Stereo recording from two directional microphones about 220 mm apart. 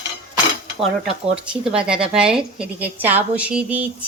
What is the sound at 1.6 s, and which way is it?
A woman's voice, 5° right (ahead or behind).